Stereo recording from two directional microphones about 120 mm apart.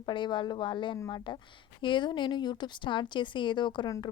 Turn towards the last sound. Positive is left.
turn(degrees=40)  # may be behind; listen again after turning